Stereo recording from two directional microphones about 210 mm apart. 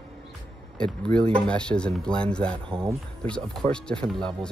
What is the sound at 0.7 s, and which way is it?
Speech, 5° left (ahead or behind).